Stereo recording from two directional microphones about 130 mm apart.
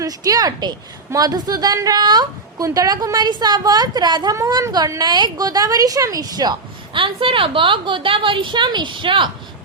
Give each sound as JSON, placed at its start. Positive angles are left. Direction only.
{"t": 0.0, "sound": "a woman's voice", "side_deg": -30}